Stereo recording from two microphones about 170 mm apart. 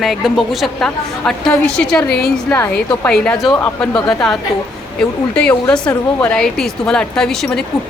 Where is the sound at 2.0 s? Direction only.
70° left (ahead or behind).